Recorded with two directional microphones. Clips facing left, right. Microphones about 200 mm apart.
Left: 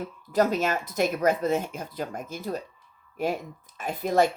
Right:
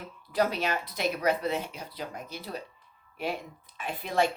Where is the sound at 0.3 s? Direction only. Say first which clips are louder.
Left 4 dB; 45° left (ahead or behind).